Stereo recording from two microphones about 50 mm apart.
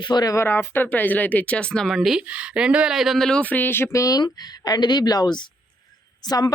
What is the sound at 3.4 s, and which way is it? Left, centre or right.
Speech, left.